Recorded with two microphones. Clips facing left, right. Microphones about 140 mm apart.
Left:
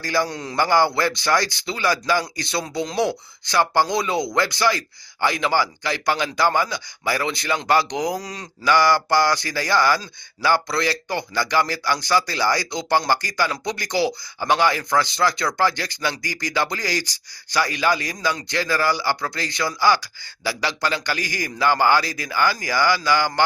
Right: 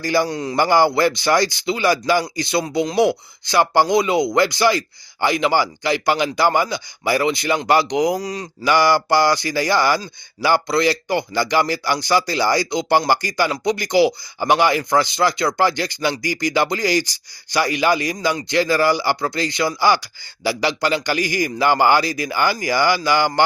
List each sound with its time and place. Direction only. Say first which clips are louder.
0.0 s speech: right 4 dB; 15° right (ahead or behind)
0.3 s a man's voice: right 6 dB; 5° right (ahead or behind)
0.5 s speech: right 3 dB; 15° right (ahead or behind)
8.7 s speech: right 2 dB; 15° right (ahead or behind)